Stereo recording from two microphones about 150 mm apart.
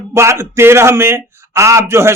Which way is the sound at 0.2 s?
20° right (ahead or behind).